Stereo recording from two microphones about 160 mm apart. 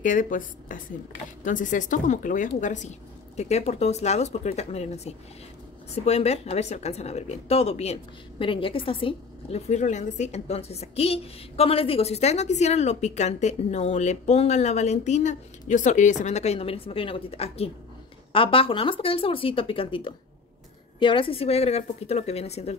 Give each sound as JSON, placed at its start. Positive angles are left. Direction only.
{"t": 0.0, "sound": "a woman's voice", "side_deg": 55}
{"t": 9.7, "sound": "a woman's voice", "side_deg": 45}